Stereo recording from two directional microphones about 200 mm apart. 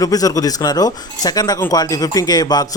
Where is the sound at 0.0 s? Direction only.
15° left (ahead or behind).